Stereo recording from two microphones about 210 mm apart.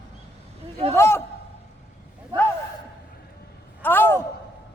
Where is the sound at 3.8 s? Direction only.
10° left (ahead or behind).